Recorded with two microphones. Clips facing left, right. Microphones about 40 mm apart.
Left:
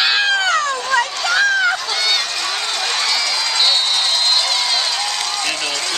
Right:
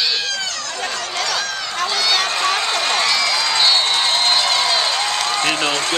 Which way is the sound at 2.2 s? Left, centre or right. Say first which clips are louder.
Right 4 dB; right.